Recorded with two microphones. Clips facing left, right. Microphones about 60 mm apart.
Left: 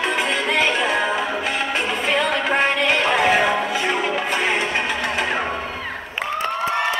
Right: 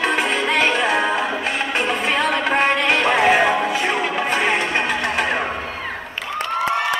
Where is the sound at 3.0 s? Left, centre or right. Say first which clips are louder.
Right 3 dB; centre.